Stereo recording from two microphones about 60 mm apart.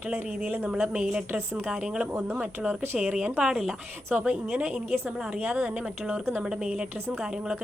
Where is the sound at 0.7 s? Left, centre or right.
Centre.